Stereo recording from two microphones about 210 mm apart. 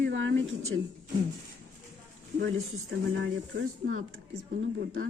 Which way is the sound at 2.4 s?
65° right (ahead or behind).